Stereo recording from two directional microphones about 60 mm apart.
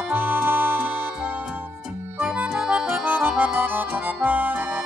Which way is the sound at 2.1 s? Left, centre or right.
Right.